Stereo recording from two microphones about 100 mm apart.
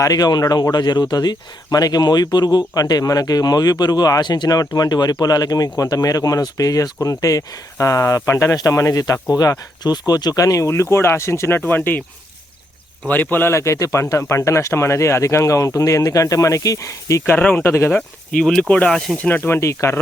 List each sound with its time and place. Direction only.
0.0 s speech: 40° left (ahead or behind); by 12.0 s 20° left (ahead or behind)
13.1 s speech: 20° left (ahead or behind)
17.2 s speech: 15° left (ahead or behind)
18.3 s speech: 5° left (ahead or behind)
19.2 s speech: 20° left (ahead or behind)